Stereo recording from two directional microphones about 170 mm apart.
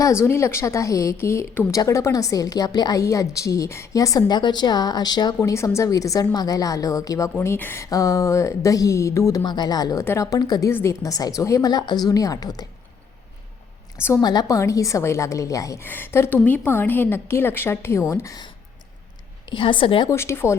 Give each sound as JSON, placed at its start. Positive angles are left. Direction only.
{"t": 0.0, "sound": "speech", "side_deg": 15}
{"t": 14.0, "sound": "a woman's voice", "side_deg": 20}
{"t": 20.1, "sound": "a woman's voice", "side_deg": 15}